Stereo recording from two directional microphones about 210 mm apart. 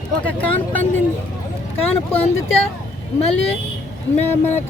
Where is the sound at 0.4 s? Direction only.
10° left (ahead or behind).